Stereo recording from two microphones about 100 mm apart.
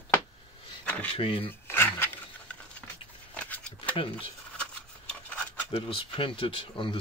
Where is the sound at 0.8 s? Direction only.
15° left (ahead or behind).